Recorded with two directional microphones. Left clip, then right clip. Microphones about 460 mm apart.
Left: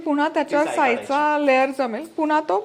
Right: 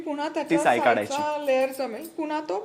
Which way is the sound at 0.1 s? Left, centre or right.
Left.